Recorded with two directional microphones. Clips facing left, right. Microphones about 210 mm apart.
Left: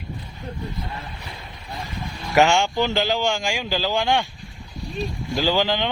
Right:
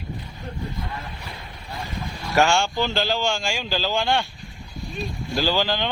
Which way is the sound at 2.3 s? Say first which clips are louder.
Left 2 dB; 15° left (ahead or behind).